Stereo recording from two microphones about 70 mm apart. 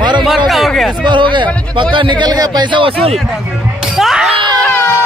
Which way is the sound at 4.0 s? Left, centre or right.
Centre.